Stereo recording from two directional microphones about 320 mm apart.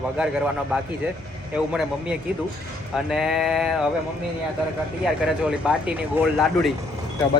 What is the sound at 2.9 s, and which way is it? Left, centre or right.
Speech, centre.